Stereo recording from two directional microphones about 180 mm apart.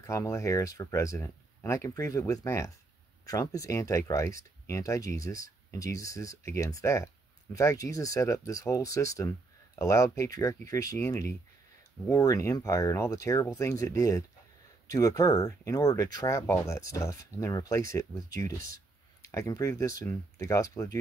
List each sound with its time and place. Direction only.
0.0 s speech: 15° left (ahead or behind)
19.2 s speech: 15° left (ahead or behind)